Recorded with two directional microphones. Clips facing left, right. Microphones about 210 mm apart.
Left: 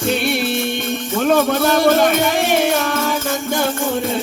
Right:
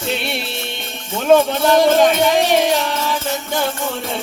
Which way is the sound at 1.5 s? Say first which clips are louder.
Right 1 dB; 50° left (ahead or behind).